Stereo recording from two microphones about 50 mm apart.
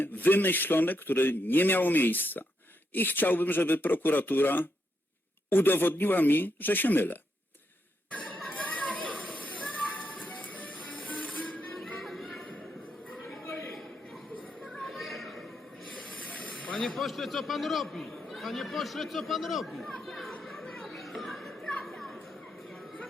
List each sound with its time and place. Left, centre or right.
0.0 s a man's voice: left
8.5 s chatter: left
9.0 s children playing: left
10.2 s music: left
12.0 s music: centre
13.4 s a sound: left
14.6 s a sound: centre
16.0 s hiss: left
16.7 s a man's voice: centre
20.4 s chatter: centre
21.8 s children playing: centre